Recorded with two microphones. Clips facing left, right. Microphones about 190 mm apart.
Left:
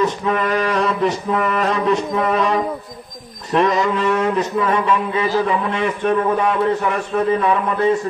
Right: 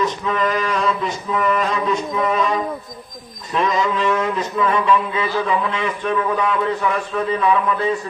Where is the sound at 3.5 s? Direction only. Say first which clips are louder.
Left 3 dB; 45° left (ahead or behind).